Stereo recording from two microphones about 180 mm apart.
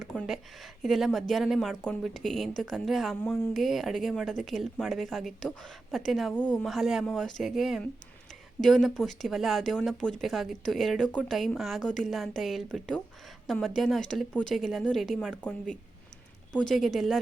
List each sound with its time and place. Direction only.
0.0 s a woman's voice: 5° left (ahead or behind)